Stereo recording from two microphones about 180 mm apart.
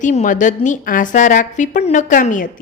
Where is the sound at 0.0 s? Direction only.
45° left (ahead or behind).